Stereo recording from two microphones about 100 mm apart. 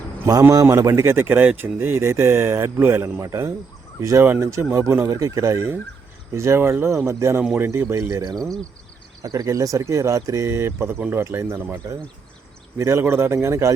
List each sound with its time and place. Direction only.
0.5 s speech: 30° right (ahead or behind)
9.2 s speech: 40° right (ahead or behind)